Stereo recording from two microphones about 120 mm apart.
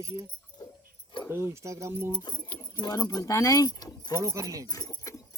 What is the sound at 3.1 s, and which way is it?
Speech, 25° left (ahead or behind).